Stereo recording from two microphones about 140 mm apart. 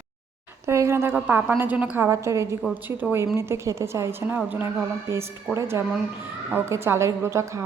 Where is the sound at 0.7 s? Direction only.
20° right (ahead or behind).